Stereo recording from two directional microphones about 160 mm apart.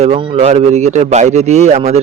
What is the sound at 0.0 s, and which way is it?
A man's voice, 35° right (ahead or behind).